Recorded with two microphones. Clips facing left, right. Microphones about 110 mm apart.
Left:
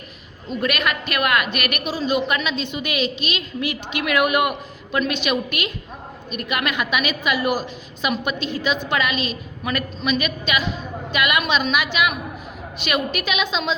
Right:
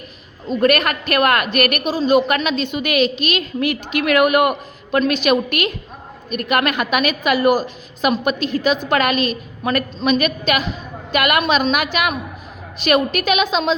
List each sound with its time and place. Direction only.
0.6 s a woman's voice: 45° right (ahead or behind)